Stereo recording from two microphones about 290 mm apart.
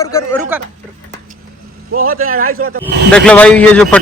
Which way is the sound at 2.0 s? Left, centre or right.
Right.